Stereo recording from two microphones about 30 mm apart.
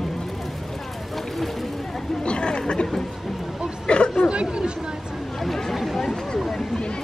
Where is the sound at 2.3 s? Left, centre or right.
Left.